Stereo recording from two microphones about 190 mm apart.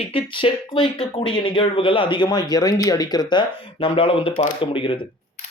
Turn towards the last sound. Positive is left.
turn(degrees=25)  # may be behind; listen again after turning